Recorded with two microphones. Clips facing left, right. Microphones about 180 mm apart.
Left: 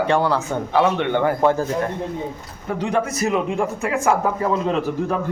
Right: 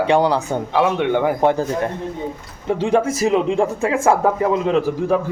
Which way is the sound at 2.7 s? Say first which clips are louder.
Right 5 dB; 25° right (ahead or behind).